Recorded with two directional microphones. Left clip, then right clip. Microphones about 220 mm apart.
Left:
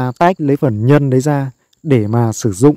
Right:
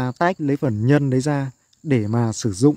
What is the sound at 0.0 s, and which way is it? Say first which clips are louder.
Speech: left 7 dB; 25° left (ahead or behind).